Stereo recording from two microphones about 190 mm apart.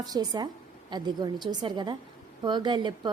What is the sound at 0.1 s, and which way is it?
A woman's voice, 20° right (ahead or behind).